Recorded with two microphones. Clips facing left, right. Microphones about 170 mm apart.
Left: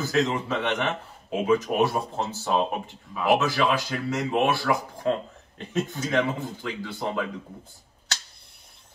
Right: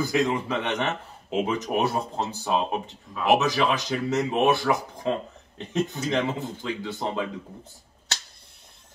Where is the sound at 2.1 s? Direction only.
15° right (ahead or behind).